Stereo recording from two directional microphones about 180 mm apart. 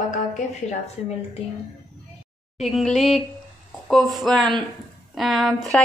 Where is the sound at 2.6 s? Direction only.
Centre (ahead or behind).